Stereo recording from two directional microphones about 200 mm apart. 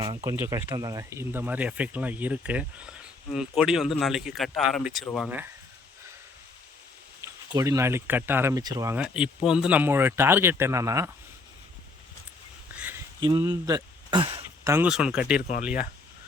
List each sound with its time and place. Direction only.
0.0 s speech: 20° right (ahead or behind); by 5.0 s centre (ahead or behind)
7.2 s speech: 15° right (ahead or behind)
12.7 s a sound: 10° right (ahead or behind)
13.2 s speech: 20° right (ahead or behind)